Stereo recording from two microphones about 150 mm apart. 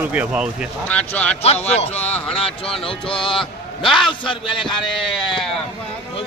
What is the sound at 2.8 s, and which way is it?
Speech, 35° left (ahead or behind).